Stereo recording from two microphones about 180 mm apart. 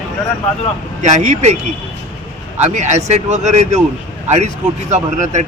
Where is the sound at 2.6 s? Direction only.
40° right (ahead or behind).